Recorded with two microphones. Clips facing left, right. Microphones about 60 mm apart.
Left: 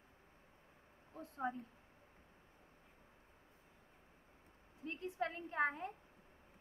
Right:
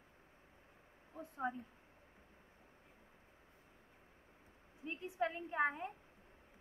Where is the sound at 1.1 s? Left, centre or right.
Right.